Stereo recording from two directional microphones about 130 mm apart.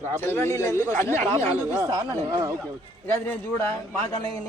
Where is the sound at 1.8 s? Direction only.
25° right (ahead or behind).